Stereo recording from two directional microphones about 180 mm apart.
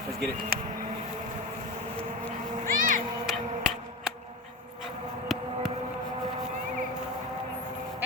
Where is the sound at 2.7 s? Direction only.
50° right (ahead or behind).